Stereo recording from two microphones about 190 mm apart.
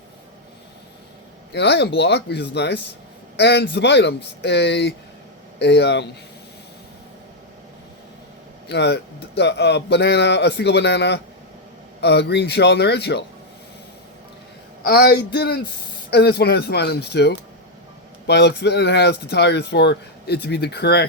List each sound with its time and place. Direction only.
1.5 s speech: 60° left (ahead or behind)
8.7 s speech: 60° left (ahead or behind)
14.8 s speech: 55° left (ahead or behind)